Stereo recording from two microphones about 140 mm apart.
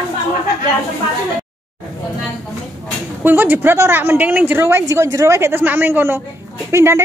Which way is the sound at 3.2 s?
15° right (ahead or behind).